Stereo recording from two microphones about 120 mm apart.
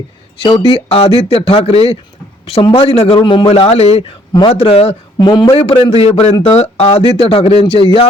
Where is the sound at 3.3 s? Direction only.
45° left (ahead or behind).